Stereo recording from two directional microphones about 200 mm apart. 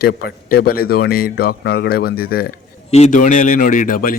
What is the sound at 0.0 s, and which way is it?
A man's voice, 50° left (ahead or behind).